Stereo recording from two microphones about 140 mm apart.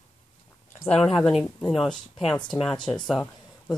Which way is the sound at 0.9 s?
5° left (ahead or behind).